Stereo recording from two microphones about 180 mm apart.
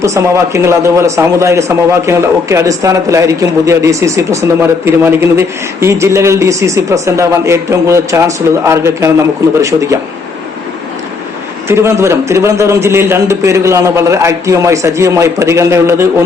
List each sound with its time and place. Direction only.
0.0 s speech: 15° right (ahead or behind)
11.7 s speech: 15° right (ahead or behind)